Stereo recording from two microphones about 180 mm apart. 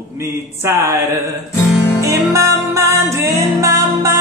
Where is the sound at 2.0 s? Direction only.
15° right (ahead or behind).